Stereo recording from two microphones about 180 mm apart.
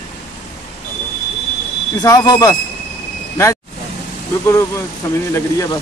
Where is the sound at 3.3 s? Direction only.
15° left (ahead or behind).